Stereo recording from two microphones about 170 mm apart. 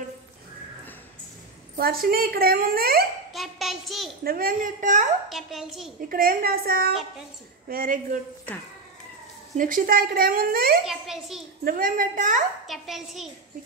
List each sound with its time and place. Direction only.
1.8 s a woman's voice: 60° right (ahead or behind)
3.3 s child singing: centre (ahead or behind)
4.2 s a woman's voice: 60° right (ahead or behind)
5.3 s a child's voice: centre (ahead or behind)
5.9 s a woman's voice: 55° right (ahead or behind)
9.6 s a woman's voice: 55° right (ahead or behind)
10.9 s a child's voice: centre (ahead or behind)
11.6 s a woman's voice: 55° right (ahead or behind)
12.6 s a child's voice: centre (ahead or behind)